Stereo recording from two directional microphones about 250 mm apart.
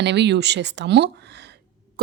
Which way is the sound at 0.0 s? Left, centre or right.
Right.